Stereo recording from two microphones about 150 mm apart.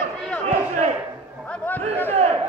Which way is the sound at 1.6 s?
10° left (ahead or behind).